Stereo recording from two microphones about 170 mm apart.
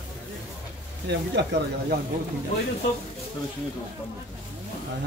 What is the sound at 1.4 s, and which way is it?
Speech, 90° right.